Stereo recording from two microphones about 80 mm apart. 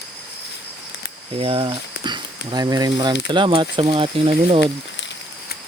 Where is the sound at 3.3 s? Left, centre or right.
Right.